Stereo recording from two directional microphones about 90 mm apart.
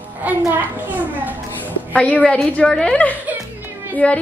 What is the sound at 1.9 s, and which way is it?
A woman's voice, 15° left (ahead or behind).